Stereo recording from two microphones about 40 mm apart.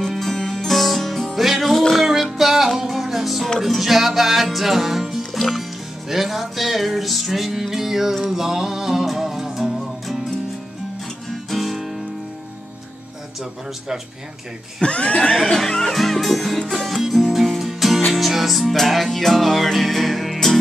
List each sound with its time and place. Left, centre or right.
0.0 s music: centre
0.7 s music: centre
11.5 s music: centre
14.9 s neigh: left
15.5 s speech: centre
17.1 s music: centre